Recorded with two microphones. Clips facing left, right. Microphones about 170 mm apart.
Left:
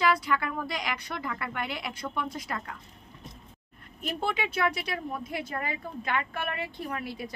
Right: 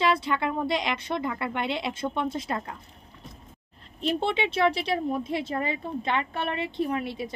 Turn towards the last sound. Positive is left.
turn(degrees=-25)  # may be behind; listen again after turning